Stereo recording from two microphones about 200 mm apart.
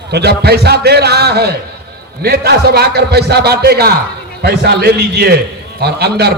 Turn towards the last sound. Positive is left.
turn(degrees=-55)  # may be behind; listen again after turning